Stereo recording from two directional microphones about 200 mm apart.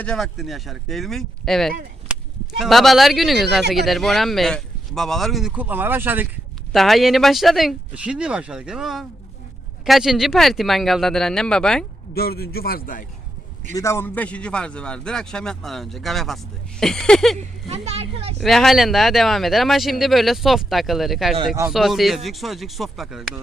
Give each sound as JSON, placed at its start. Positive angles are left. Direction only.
{"t": 0.0, "sound": "a man's voice", "side_deg": 0}
{"t": 12.1, "sound": "a man's voice", "side_deg": 50}
{"t": 13.7, "sound": "a man's voice", "side_deg": 15}
{"t": 17.3, "sound": "speech", "side_deg": -30}
{"t": 18.3, "sound": "a man's voice", "side_deg": 0}
{"t": 21.3, "sound": "speech", "side_deg": -15}
{"t": 21.7, "sound": "a man's voice", "side_deg": 0}